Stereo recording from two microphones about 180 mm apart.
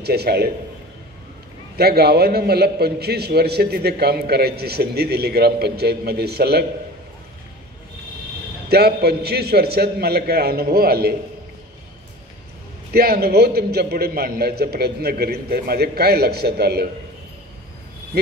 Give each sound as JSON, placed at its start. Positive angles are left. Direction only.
{"t": 0.0, "sound": "a man's voice", "side_deg": -60}
{"t": 1.8, "sound": "a man's voice", "side_deg": -60}
{"t": 8.6, "sound": "a man's voice", "side_deg": -60}
{"t": 12.9, "sound": "a man's voice", "side_deg": -60}